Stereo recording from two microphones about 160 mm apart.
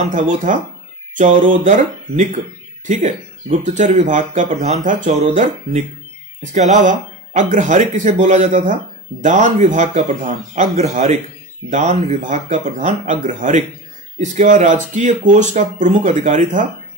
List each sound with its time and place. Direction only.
0.1 s speech: 55° right (ahead or behind)
6.8 s speech: 50° right (ahead or behind)